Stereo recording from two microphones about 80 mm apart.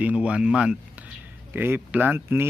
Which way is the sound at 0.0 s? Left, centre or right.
Centre.